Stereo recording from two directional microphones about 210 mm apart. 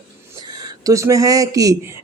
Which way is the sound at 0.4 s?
20° right (ahead or behind).